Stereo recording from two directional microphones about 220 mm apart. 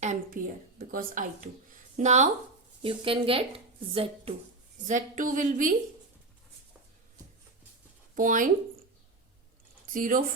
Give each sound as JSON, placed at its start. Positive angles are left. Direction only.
{"t": 0.0, "sound": "speech", "side_deg": -35}
{"t": 4.9, "sound": "speech", "side_deg": -35}
{"t": 8.1, "sound": "speech", "side_deg": -35}
{"t": 9.9, "sound": "speech", "side_deg": -40}